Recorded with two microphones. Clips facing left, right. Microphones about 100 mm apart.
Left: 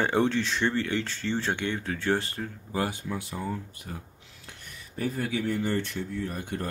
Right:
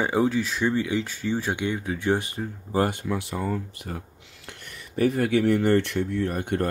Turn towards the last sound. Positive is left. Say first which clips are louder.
# right 7 dB
turn(degrees=-60)  # may be behind; listen again after turning